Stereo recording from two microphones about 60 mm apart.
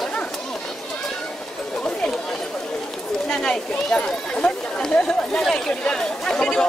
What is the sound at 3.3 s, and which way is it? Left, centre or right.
Speech, centre.